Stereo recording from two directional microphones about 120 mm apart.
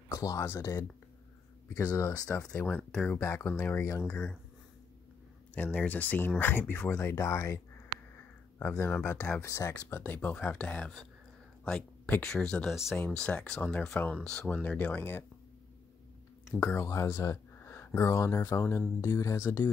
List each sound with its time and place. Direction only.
0.1 s speech: 30° left (ahead or behind)
2.3 s speech: 10° left (ahead or behind)
3.2 s speech: 20° left (ahead or behind)
5.5 s speech: 10° left (ahead or behind)
7.2 s speech: 25° left (ahead or behind)
16.5 s speech: 20° left (ahead or behind)